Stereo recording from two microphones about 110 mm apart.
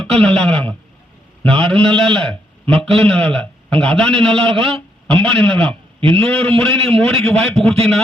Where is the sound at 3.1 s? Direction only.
10° left (ahead or behind).